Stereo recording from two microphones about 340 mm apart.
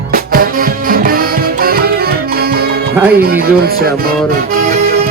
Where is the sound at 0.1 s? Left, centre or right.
Right.